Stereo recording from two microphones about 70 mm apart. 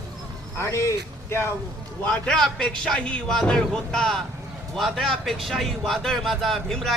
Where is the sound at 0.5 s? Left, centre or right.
Left.